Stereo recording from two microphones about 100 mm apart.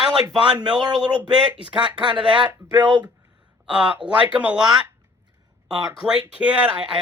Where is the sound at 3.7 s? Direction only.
10° right (ahead or behind).